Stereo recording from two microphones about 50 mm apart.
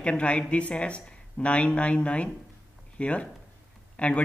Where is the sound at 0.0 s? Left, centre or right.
Left.